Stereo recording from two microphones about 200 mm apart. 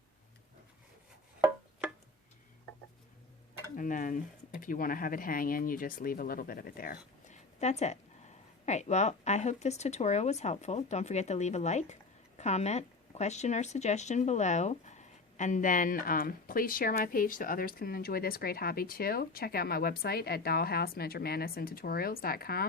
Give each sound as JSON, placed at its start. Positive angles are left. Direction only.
{"t": 3.8, "sound": "speech", "side_deg": 40}